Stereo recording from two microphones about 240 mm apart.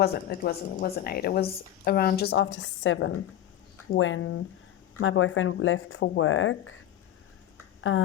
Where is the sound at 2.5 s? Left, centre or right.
Left.